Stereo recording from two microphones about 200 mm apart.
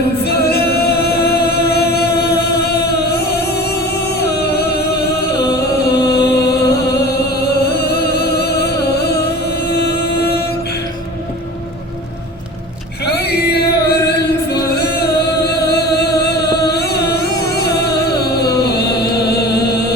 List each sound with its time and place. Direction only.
0.3 s singing: 55° left (ahead or behind)
4.2 s music: 50° left (ahead or behind)
6.1 s music: 55° left (ahead or behind)
13.1 s music: 55° left (ahead or behind)